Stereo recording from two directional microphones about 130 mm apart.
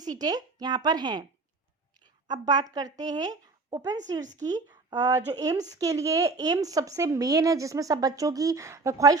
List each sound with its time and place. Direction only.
0.0 s speech: 30° right (ahead or behind)
2.2 s a woman's voice: 30° right (ahead or behind)